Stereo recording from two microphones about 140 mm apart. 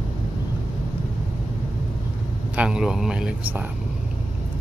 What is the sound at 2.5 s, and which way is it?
Speech, 5° right (ahead or behind).